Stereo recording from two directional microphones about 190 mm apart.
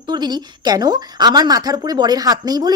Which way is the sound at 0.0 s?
20° right (ahead or behind).